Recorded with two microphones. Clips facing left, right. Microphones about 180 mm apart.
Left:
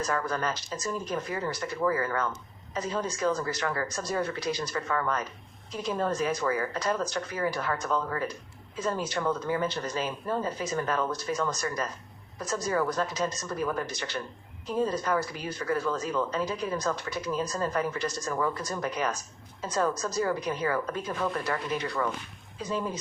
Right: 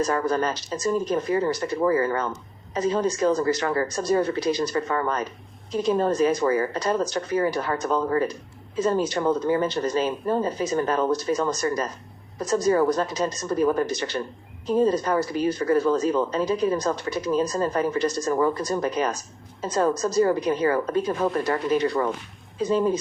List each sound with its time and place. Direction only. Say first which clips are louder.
0.0 s speech: right 7 dB; 30° right (ahead or behind)